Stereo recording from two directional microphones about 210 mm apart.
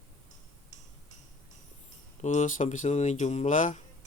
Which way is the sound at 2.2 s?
35° left (ahead or behind).